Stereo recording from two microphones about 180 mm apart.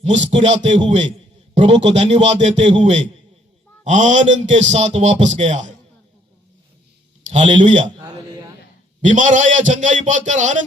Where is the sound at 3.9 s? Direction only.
45° right (ahead or behind).